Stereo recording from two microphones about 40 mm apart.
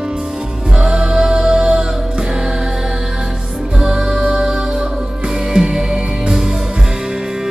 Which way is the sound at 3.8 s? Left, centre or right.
Centre.